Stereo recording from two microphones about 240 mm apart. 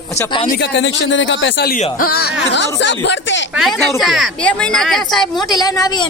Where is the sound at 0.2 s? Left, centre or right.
Centre.